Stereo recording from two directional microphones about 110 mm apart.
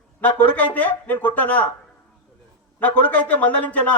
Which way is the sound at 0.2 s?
15° left (ahead or behind).